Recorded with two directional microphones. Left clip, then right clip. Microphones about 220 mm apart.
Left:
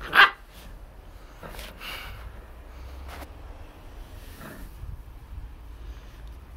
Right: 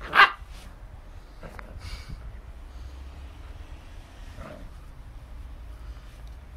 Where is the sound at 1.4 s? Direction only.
10° left (ahead or behind).